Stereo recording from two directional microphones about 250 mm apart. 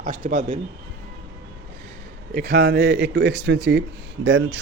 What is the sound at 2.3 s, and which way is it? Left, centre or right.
Speech, right.